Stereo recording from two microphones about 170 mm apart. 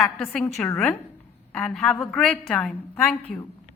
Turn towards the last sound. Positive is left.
turn(degrees=10)  # may be behind; listen again after turning